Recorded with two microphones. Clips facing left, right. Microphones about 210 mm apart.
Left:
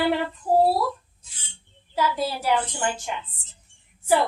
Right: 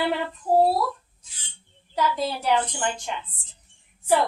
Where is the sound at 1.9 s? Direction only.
5° left (ahead or behind).